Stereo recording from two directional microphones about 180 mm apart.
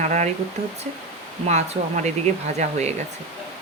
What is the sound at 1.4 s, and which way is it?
Speech, 40° right (ahead or behind).